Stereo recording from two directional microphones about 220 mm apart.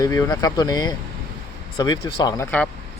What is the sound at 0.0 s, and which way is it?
Speech, 15° left (ahead or behind).